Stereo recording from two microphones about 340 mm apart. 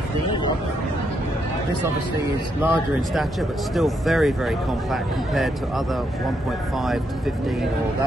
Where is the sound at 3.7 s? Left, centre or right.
Centre.